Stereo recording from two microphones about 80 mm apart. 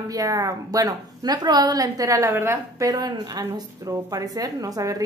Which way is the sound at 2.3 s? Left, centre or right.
Right.